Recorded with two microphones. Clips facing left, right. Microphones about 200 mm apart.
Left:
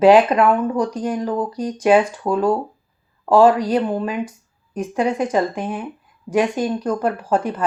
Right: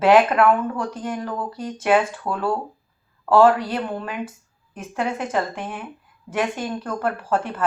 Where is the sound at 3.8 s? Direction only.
15° left (ahead or behind).